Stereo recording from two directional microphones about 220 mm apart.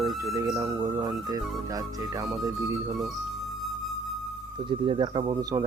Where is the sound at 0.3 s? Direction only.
15° right (ahead or behind).